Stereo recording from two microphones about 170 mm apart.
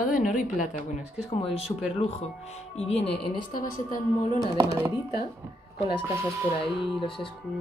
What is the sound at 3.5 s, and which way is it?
Speech, 55° left (ahead or behind).